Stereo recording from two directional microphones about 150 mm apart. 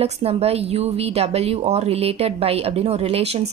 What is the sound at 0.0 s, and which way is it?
A woman's voice, 45° right (ahead or behind).